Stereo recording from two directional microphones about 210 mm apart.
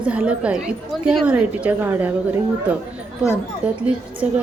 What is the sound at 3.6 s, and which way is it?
Speech, 5° right (ahead or behind).